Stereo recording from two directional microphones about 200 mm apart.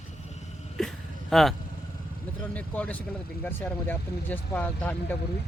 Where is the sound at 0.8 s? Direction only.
Centre (ahead or behind).